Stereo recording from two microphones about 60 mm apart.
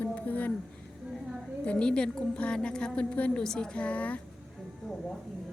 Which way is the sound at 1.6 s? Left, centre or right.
Centre.